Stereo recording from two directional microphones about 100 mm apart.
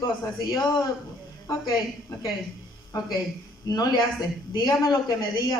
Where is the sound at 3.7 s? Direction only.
40° left (ahead or behind).